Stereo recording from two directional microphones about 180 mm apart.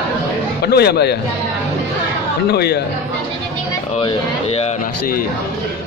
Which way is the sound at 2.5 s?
65° left (ahead or behind).